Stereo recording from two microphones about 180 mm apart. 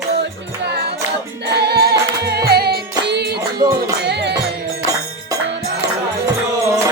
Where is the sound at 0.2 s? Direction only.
70° right (ahead or behind).